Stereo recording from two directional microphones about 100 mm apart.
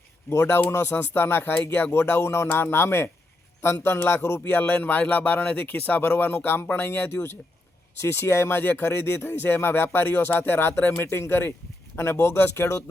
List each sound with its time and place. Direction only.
0.3 s speech: 25° left (ahead or behind)